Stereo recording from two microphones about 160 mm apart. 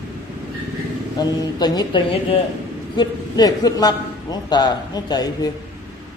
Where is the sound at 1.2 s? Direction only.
25° left (ahead or behind).